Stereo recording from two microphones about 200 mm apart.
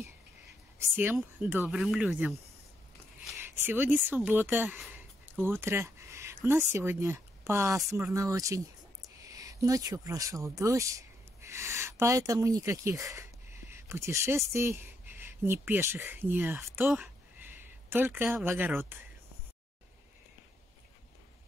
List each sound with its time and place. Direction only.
0.7 s speech: 10° right (ahead or behind)
3.3 s a sound: 10° right (ahead or behind)
4.1 s speech: 10° right (ahead or behind)